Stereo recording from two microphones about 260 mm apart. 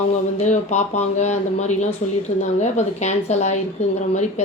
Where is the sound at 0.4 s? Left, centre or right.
Left.